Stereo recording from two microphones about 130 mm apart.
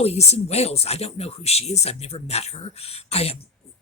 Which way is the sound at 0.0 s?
55° left (ahead or behind).